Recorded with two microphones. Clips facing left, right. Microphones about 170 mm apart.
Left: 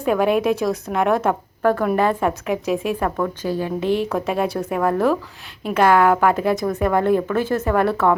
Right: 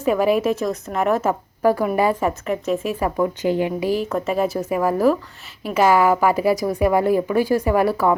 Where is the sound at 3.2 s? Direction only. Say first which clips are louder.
Right 3 dB; 20° right (ahead or behind).